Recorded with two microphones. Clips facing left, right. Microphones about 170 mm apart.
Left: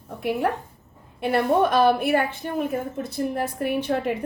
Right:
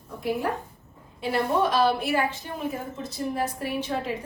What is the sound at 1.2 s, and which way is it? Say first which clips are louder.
A woman's voice: left 4 dB; 55° left (ahead or behind).